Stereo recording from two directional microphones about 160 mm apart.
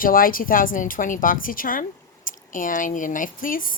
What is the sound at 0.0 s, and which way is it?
A woman's voice, 60° left (ahead or behind).